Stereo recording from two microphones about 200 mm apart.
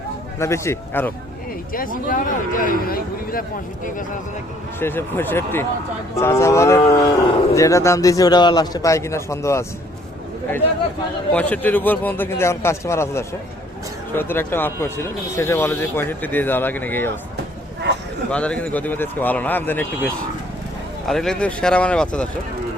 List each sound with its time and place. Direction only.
0.3 s cattle: 15° left (ahead or behind)
1.7 s speech: 45° left (ahead or behind)
4.8 s cattle: 10° left (ahead or behind)
11.3 s cattle: 5° left (ahead or behind)
18.3 s cattle: 5° left (ahead or behind)
21.1 s speech: centre (ahead or behind)